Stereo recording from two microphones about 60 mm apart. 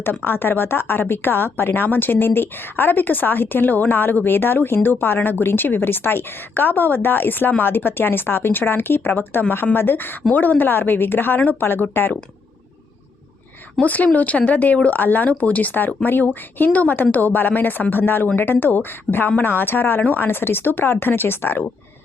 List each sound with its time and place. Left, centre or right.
0.3 s speech: left
13.8 s speech: left